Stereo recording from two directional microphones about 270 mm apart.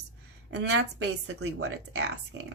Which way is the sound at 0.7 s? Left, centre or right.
Right.